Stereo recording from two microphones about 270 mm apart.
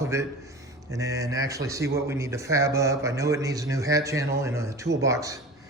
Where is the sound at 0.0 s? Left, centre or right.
Centre.